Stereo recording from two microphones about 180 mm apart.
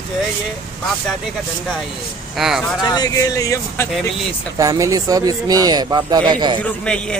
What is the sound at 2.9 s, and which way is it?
Speech, 20° left (ahead or behind).